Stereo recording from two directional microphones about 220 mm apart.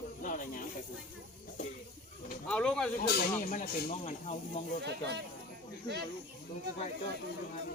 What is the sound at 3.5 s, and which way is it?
Speech, 35° left (ahead or behind).